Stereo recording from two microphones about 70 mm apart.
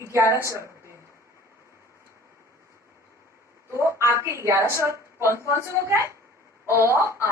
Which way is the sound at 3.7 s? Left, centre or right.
Right.